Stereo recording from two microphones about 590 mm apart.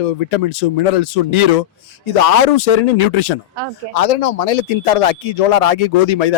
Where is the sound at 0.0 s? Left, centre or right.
Left.